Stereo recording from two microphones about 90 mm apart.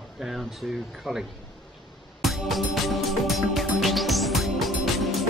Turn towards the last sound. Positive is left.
turn(degrees=0)  # may be behind; listen again after turning